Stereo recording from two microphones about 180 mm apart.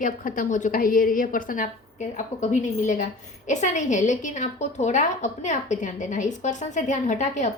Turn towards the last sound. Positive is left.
turn(degrees=40)  # may be behind; listen again after turning